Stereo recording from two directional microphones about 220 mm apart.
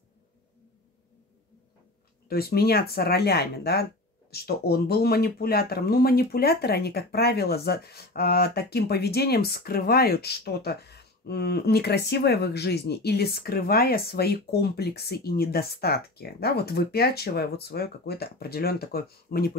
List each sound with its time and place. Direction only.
2.2 s speech: 45° left (ahead or behind)